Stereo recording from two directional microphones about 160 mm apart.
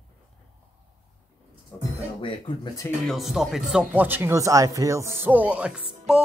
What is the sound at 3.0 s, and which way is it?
Speech, centre (ahead or behind).